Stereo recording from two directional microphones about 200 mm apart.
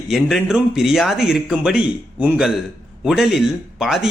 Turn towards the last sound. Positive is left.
turn(degrees=-5)  # may be behind; listen again after turning